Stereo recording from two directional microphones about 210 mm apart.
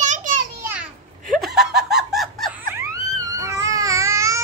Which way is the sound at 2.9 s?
15° right (ahead or behind).